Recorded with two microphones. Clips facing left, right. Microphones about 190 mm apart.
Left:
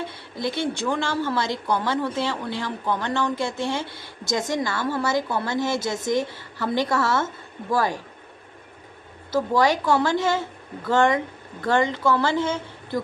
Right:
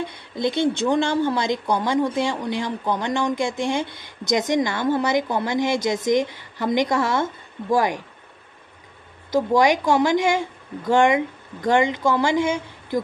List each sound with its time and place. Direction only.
0.0 s speech: 20° right (ahead or behind)
9.3 s speech: 15° right (ahead or behind)